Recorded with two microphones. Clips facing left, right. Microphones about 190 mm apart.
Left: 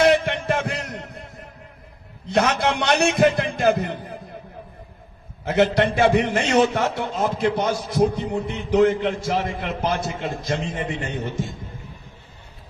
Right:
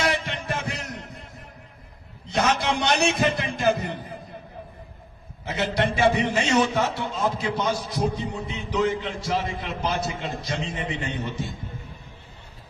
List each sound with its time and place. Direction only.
0.0 s music: 60° left (ahead or behind)
2.2 s a man's voice: 60° left (ahead or behind)
5.5 s a man's voice: 55° left (ahead or behind)